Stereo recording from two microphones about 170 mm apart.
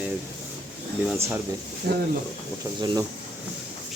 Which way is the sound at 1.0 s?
10° right (ahead or behind).